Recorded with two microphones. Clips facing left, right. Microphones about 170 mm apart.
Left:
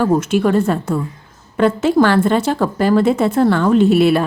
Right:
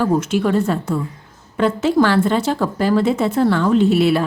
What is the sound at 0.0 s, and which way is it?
A woman's voice, 55° left (ahead or behind).